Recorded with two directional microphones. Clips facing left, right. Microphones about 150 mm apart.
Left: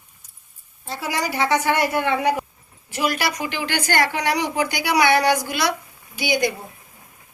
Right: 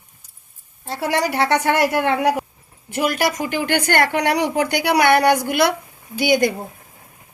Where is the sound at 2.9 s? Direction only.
55° right (ahead or behind).